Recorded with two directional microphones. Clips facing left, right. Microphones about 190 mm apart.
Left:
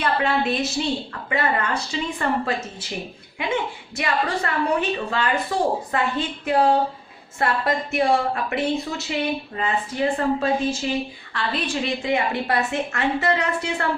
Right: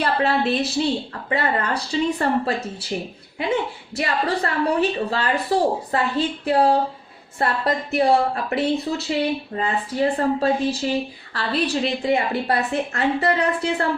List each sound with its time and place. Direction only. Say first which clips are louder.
0.0 s a woman's voice: right 2 dB; 35° right (ahead or behind)
3.4 s a woman's voice: right 2 dB; 35° right (ahead or behind)